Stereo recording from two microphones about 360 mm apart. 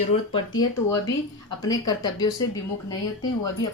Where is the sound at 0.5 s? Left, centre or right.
Left.